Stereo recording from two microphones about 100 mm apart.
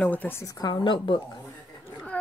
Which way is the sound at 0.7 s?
55° left (ahead or behind).